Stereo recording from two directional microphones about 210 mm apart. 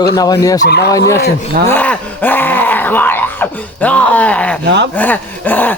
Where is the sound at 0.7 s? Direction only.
50° left (ahead or behind).